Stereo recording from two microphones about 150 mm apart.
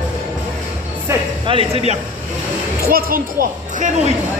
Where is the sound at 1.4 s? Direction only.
40° right (ahead or behind).